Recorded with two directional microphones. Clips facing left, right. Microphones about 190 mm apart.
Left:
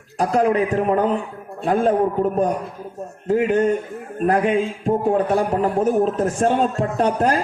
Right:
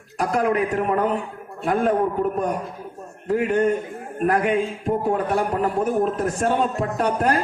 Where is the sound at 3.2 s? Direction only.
35° left (ahead or behind).